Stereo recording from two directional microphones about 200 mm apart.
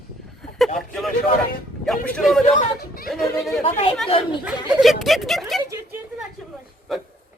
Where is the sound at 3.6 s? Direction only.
30° left (ahead or behind).